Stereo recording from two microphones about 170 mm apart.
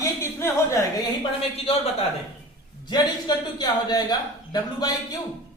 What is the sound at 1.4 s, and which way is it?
Speech, 35° left (ahead or behind).